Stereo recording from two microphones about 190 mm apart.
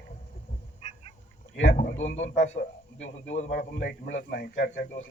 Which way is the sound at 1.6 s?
45° left (ahead or behind).